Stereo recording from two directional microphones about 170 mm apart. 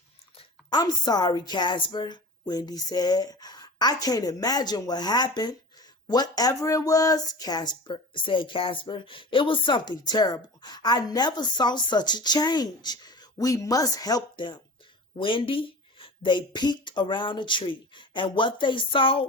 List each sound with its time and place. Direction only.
0.3 s speech: 25° left (ahead or behind)